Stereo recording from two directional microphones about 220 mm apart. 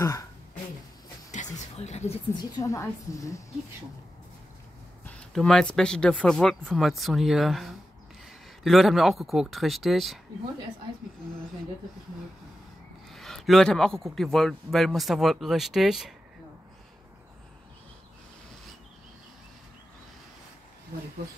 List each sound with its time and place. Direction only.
0.0 s throat clearing: 15° left (ahead or behind)
1.3 s a woman's voice: 30° left (ahead or behind); by 3.4 s 15° left (ahead or behind)
5.0 s speech: 5° left (ahead or behind)
13.1 s speech: centre (ahead or behind)